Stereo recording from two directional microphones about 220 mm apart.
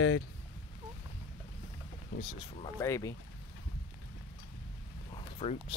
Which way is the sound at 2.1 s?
35° left (ahead or behind).